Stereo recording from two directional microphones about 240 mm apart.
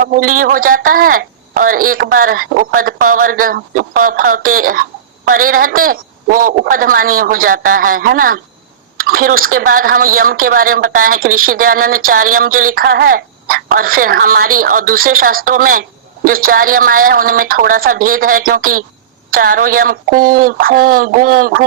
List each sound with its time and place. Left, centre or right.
0.0 s speech: right